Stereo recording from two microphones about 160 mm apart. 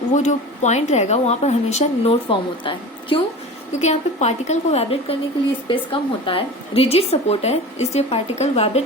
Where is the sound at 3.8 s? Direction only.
45° left (ahead or behind).